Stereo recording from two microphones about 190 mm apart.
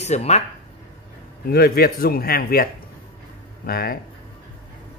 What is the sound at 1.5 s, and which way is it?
Speech, 55° left (ahead or behind).